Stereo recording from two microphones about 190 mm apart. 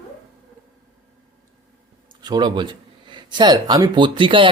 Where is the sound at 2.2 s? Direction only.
25° right (ahead or behind).